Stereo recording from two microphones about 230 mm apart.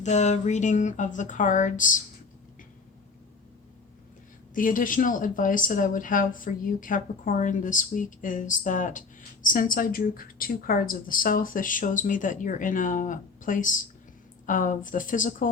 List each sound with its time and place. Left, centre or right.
0.0 s speech: left
4.5 s speech: left